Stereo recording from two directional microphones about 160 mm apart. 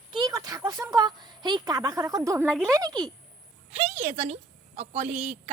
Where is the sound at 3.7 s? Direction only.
40° right (ahead or behind).